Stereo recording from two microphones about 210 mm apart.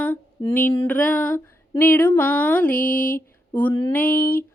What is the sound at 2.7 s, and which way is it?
Mantra, 40° left (ahead or behind).